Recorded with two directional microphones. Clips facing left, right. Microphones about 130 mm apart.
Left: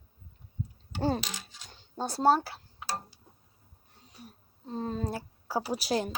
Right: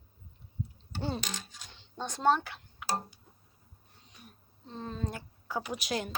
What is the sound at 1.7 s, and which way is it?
Speech, 40° left (ahead or behind).